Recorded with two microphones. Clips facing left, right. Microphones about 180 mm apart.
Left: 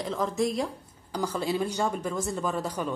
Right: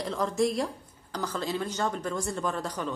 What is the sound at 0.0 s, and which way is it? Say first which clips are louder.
A woman's voice: even; centre (ahead or behind).